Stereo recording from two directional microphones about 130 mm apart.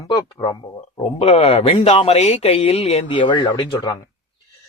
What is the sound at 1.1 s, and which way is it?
Speech, 50° left (ahead or behind).